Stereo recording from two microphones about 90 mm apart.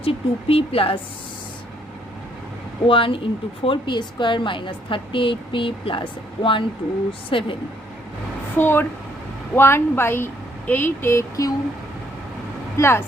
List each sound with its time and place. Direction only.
0.0 s speech: 90° left
2.8 s a woman's voice: 75° left (ahead or behind)
8.5 s a woman's voice: 25° left (ahead or behind)
12.7 s a woman's voice: 30° left (ahead or behind)